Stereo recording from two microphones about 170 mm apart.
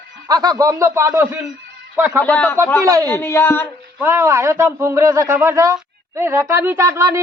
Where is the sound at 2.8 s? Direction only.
20° right (ahead or behind).